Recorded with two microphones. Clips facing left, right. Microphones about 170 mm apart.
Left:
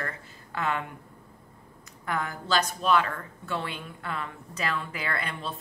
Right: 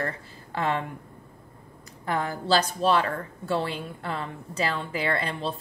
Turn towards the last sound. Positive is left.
turn(degrees=-30)  # may be behind; listen again after turning